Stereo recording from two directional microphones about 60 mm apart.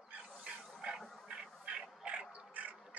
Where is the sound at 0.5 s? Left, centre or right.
Centre.